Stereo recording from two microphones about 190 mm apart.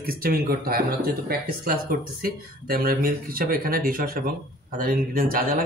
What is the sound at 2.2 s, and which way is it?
Speech, 50° right (ahead or behind).